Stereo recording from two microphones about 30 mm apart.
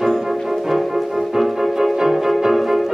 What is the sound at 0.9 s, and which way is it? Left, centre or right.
Music, centre.